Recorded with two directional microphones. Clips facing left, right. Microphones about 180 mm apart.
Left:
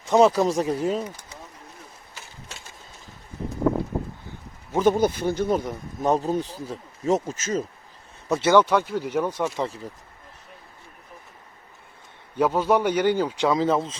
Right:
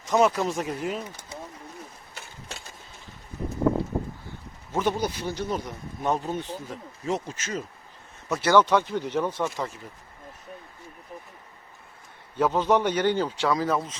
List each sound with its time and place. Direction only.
0.0 s speech: 30° left (ahead or behind)
4.8 s speech: 50° left (ahead or behind)
6.1 s speech: 35° left (ahead or behind)
8.3 s a man's voice: 20° left (ahead or behind)
12.4 s a man's voice: 10° left (ahead or behind); by 14.0 s 25° left (ahead or behind)